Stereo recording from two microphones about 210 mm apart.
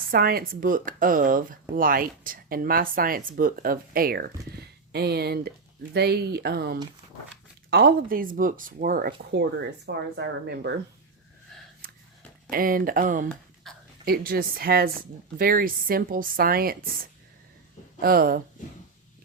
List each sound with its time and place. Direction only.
0.1 s speech: 45° right (ahead or behind)
9.4 s speech: 55° right (ahead or behind)
12.5 s speech: 40° right (ahead or behind)
13.7 s a sound: centre (ahead or behind)
14.0 s speech: 45° right (ahead or behind)